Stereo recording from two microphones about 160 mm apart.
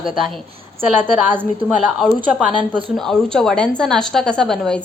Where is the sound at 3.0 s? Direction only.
5° left (ahead or behind).